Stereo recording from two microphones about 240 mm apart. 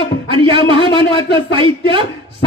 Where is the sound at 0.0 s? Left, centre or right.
Right.